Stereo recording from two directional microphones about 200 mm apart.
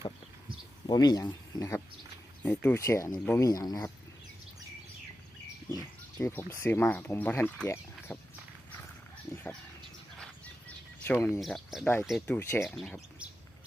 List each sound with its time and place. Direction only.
0.9 s speech: 20° left (ahead or behind)
5.7 s speech: 15° left (ahead or behind)
9.3 s a sound: 10° left (ahead or behind)
11.0 s speech: 10° left (ahead or behind)
11.3 s speech: centre (ahead or behind)
12.4 s speech: 10° left (ahead or behind)
12.6 s speech: centre (ahead or behind)